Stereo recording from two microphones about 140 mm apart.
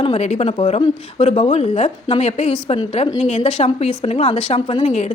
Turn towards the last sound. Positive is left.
turn(degrees=55)  # may be behind; listen again after turning